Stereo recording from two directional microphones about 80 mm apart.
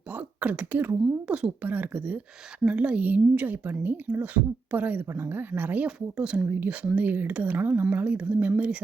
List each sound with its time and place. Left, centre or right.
0.1 s speech: centre
1.0 s speech: centre
5.0 s speech: right